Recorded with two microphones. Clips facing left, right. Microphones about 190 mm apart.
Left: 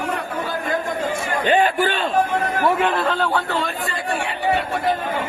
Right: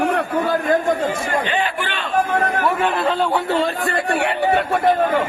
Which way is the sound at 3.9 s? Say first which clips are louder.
Right 5 dB; 65° right (ahead or behind).